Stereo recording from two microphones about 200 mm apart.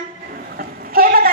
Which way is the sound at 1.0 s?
45° right (ahead or behind).